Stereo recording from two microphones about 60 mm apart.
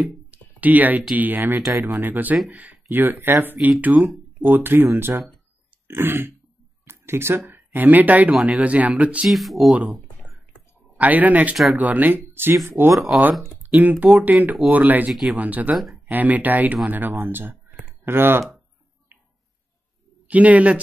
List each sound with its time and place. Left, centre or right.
0.3 s a sound: right
1.1 s speech: right
6.8 s a sound: right
7.7 s speech: right
9.3 s speech: centre
11.0 s speech: right
13.6 s speech: right
20.2 s speech: right